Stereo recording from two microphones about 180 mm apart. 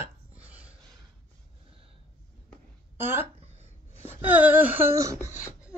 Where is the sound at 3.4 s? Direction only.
35° right (ahead or behind).